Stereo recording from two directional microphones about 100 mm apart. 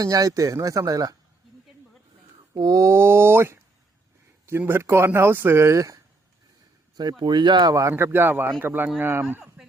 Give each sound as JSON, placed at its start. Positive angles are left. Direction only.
{"t": 0.0, "sound": "speech", "side_deg": -35}
{"t": 2.6, "sound": "speech", "side_deg": -40}
{"t": 6.9, "sound": "speech", "side_deg": -45}